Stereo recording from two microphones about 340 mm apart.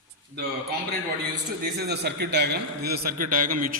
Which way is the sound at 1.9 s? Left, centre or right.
Right.